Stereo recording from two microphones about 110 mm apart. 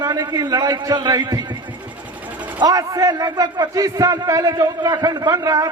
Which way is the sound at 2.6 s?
35° right (ahead or behind).